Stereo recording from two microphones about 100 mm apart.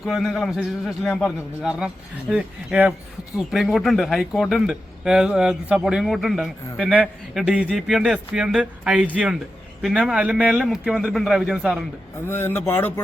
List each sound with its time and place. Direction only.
0.0 s a man's voice: centre (ahead or behind)
12.3 s speech: 20° left (ahead or behind)